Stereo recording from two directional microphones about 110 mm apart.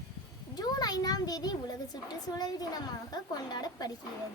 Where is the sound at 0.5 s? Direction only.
35° left (ahead or behind).